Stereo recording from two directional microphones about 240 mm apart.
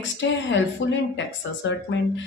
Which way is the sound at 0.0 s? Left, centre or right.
Left.